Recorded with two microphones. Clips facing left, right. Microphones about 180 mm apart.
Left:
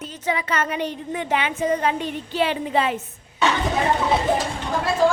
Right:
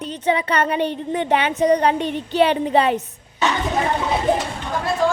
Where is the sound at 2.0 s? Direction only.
70° right (ahead or behind).